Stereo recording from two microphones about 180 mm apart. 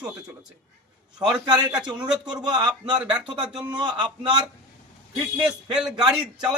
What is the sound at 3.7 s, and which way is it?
Speech, 25° right (ahead or behind).